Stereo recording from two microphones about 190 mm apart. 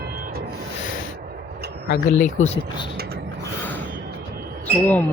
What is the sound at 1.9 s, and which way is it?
Speech, 40° left (ahead or behind).